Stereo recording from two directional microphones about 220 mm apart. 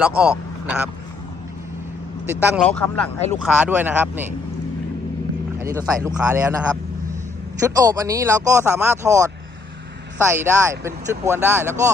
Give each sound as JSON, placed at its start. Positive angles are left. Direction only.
{"t": 0.0, "sound": "speech", "side_deg": -5}
{"t": 2.2, "sound": "speech", "side_deg": -10}
{"t": 2.6, "sound": "speech", "side_deg": 5}
{"t": 3.3, "sound": "speech", "side_deg": -5}
{"t": 5.8, "sound": "speech", "side_deg": -15}
{"t": 6.1, "sound": "speech", "side_deg": -5}
{"t": 7.8, "sound": "speech", "side_deg": -15}